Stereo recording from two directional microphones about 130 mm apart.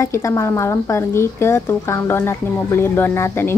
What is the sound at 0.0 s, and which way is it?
Speech, 25° left (ahead or behind).